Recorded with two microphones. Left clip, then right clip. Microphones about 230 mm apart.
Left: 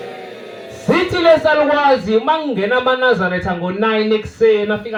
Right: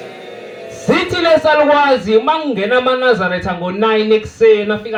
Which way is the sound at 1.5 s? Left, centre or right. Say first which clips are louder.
Right 2 dB; right.